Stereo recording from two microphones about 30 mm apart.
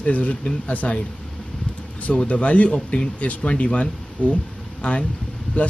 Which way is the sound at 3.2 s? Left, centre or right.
Left.